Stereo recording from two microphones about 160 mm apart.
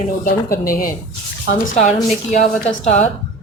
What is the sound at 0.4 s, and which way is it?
Speech, 65° left (ahead or behind).